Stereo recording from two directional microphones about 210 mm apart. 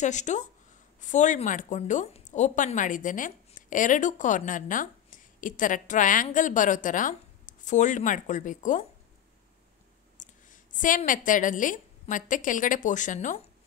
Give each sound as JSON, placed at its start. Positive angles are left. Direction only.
{"t": 0.0, "sound": "a woman's voice", "side_deg": 35}
{"t": 10.1, "sound": "a woman's voice", "side_deg": 40}